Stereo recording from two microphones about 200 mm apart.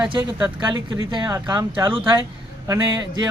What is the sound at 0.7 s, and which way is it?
Speech, 20° right (ahead or behind).